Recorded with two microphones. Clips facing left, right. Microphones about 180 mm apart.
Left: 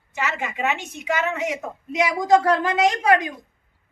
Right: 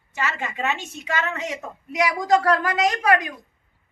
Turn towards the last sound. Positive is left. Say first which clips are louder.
# left 1 dB
turn(degrees=25)  # may be behind; listen again after turning